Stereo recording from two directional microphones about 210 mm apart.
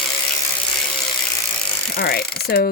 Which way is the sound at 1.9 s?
45° left (ahead or behind).